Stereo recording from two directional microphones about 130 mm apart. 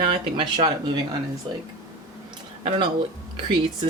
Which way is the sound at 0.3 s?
40° right (ahead or behind).